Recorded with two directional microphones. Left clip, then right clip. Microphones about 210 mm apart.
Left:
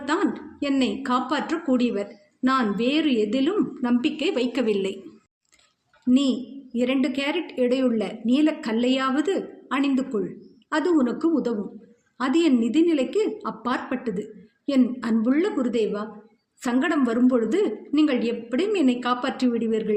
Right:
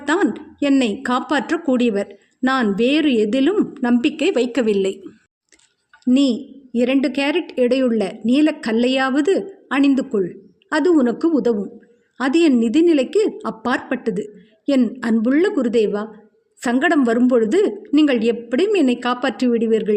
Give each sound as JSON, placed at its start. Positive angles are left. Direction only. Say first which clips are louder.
{"t": 0.0, "sound": "a woman's voice", "louder": "right 6 dB", "side_deg": -50}
{"t": 6.1, "sound": "a woman's voice", "louder": "right 5 dB", "side_deg": -50}